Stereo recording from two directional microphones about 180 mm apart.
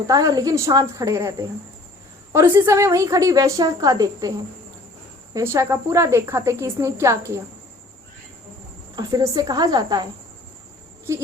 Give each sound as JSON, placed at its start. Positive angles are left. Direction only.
{"t": 0.1, "sound": "a woman's voice", "side_deg": -20}
{"t": 9.0, "sound": "a woman's voice", "side_deg": -20}
{"t": 11.1, "sound": "speech", "side_deg": -15}